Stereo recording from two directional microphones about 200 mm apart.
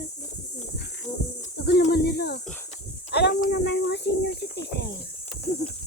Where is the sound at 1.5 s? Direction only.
55° left (ahead or behind).